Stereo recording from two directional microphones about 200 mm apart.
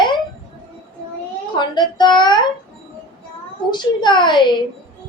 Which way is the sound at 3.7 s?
20° left (ahead or behind).